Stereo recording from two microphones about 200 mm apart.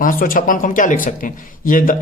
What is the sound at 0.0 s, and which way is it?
Speech, 45° left (ahead or behind).